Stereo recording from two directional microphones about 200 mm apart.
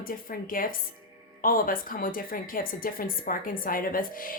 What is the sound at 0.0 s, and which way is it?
A woman's voice, 45° left (ahead or behind).